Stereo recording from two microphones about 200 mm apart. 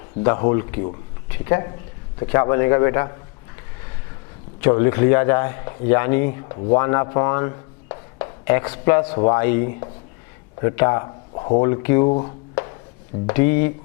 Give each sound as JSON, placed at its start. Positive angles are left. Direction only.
{"t": 0.2, "sound": "a man's voice", "side_deg": 20}
{"t": 4.6, "sound": "a man's voice", "side_deg": 15}
{"t": 12.0, "sound": "speech", "side_deg": 30}
{"t": 13.2, "sound": "speech", "side_deg": 15}